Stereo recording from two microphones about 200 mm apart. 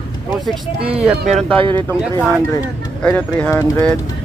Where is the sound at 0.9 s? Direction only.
5° right (ahead or behind).